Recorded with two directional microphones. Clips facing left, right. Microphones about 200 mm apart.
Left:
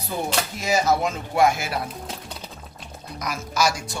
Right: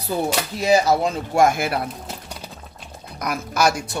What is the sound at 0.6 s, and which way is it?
Speech, 35° right (ahead or behind).